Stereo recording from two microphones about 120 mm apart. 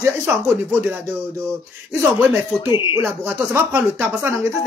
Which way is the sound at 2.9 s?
15° right (ahead or behind).